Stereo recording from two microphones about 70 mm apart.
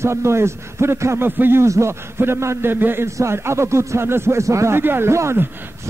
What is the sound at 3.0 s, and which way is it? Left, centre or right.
A man's voice, right.